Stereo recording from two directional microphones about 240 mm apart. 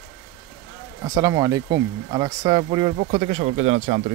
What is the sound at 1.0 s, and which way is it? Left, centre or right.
Speech, centre.